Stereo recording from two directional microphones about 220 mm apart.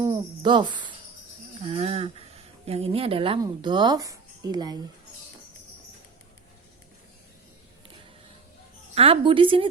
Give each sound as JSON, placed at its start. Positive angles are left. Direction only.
{"t": 0.0, "sound": "a sound", "side_deg": -15}
{"t": 1.6, "sound": "speech", "side_deg": -25}
{"t": 9.0, "sound": "a woman's voice", "side_deg": -25}